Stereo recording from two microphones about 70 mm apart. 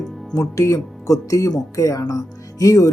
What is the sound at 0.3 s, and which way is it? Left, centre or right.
Speech, left.